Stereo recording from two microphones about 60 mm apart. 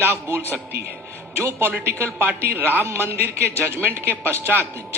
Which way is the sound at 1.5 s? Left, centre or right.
Right.